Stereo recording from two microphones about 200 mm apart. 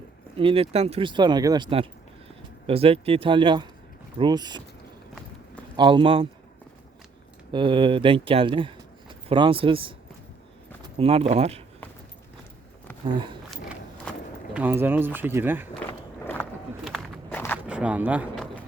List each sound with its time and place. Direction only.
0.3 s speech: 30° right (ahead or behind)
5.7 s speech: 25° right (ahead or behind)
7.5 s speech: 25° right (ahead or behind)
13.1 s speech: 25° right (ahead or behind)
13.5 s a sound: centre (ahead or behind)
14.5 s speech: 10° right (ahead or behind)
15.9 s walk: 10° left (ahead or behind)
16.8 s walk: centre (ahead or behind)
17.7 s speech: 5° right (ahead or behind)